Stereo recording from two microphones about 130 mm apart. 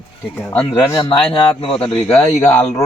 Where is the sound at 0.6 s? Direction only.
40° left (ahead or behind).